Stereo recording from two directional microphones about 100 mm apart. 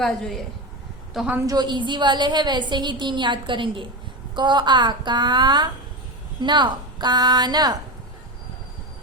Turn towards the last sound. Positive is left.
turn(degrees=-45)  # may be behind; listen again after turning